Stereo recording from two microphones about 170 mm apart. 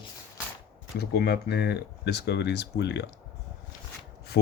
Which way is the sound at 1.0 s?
70° left (ahead or behind).